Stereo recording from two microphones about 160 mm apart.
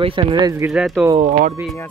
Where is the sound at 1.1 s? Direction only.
45° right (ahead or behind).